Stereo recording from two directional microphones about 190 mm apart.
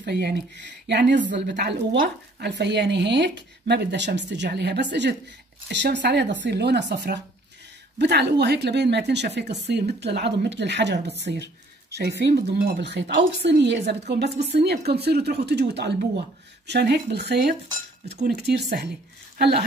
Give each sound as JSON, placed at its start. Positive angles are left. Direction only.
{"t": 0.0, "sound": "speech", "side_deg": -60}